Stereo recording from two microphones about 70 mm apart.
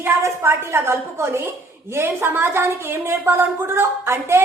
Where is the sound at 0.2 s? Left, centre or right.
Right.